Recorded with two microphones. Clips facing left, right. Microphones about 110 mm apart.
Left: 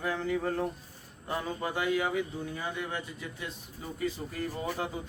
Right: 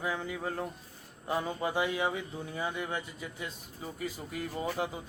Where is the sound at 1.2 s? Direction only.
20° right (ahead or behind).